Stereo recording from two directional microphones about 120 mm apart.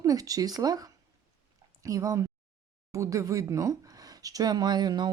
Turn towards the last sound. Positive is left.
turn(degrees=-35)  # may be behind; listen again after turning